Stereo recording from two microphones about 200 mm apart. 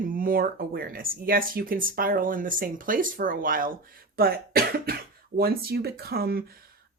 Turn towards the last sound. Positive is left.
turn(degrees=-50)  # may be behind; listen again after turning